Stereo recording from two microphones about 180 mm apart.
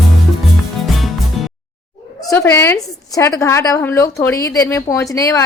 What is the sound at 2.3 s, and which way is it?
A woman's voice, 15° left (ahead or behind).